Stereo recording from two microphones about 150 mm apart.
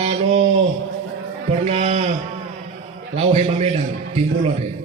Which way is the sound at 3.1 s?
45° right (ahead or behind).